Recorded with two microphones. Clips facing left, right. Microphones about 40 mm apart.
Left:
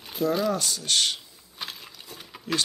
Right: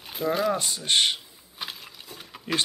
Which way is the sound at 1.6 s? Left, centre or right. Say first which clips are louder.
Right 1 dB; centre.